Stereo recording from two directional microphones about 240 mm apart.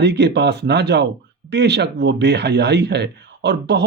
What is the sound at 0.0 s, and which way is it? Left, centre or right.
Speech, right.